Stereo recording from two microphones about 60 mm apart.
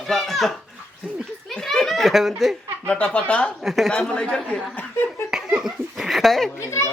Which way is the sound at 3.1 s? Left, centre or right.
Centre.